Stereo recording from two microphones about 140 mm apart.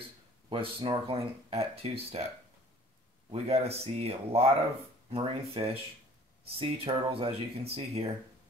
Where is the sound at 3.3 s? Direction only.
45° right (ahead or behind).